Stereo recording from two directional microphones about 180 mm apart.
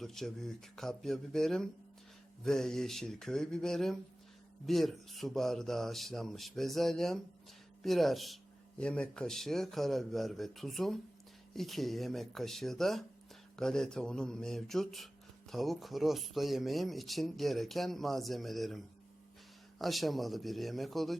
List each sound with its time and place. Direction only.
0.0 s speech: centre (ahead or behind)
19.8 s speech: centre (ahead or behind)